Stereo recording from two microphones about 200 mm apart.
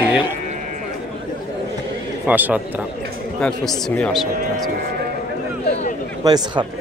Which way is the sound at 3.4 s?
5° left (ahead or behind).